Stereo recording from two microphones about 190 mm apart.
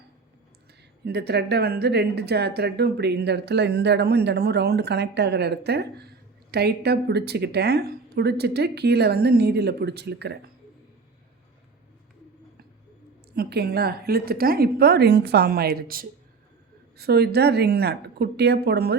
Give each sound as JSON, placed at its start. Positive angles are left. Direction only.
{"t": 1.0, "sound": "speech", "side_deg": -60}
{"t": 13.3, "sound": "speech", "side_deg": -55}